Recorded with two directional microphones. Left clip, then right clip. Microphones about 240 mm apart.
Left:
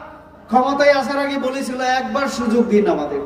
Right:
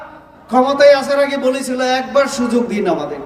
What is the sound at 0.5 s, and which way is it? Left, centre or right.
A man's voice, centre.